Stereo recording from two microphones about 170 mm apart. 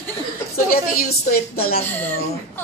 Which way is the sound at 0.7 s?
60° left (ahead or behind).